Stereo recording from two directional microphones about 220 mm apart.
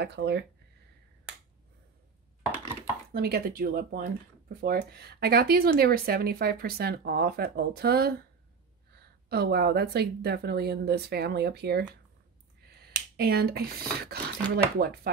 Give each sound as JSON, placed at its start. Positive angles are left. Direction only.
{"t": 0.0, "sound": "speech", "side_deg": -50}
{"t": 3.1, "sound": "speech", "side_deg": -45}